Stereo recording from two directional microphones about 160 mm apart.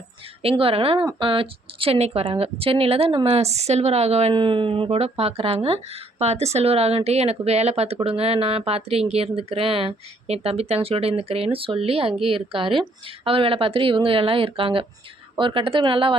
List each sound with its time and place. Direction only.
0.4 s speech: 35° right (ahead or behind)